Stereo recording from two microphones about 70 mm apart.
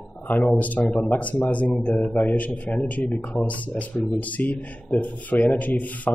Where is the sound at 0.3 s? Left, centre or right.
Left.